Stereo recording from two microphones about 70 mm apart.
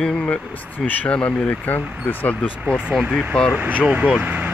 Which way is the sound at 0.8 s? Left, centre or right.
Centre.